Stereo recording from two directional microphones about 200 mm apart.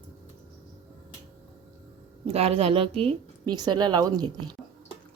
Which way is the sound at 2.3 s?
30° right (ahead or behind).